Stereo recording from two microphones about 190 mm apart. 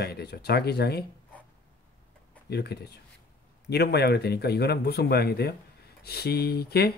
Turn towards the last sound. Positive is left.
turn(degrees=55)  # may be behind; listen again after turning